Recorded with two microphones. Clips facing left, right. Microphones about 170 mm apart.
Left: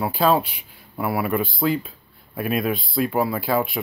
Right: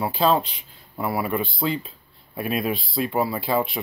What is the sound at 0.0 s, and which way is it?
Speech, 5° left (ahead or behind).